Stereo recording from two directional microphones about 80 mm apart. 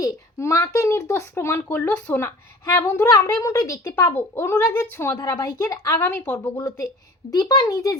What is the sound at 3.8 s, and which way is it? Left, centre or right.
Speech, left.